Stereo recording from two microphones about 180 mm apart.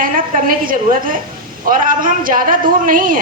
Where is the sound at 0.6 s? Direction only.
50° right (ahead or behind).